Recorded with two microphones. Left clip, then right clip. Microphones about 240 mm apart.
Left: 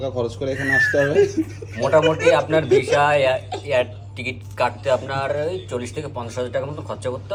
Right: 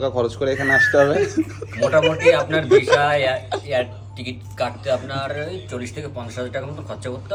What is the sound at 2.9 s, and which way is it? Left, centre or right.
Speech, centre.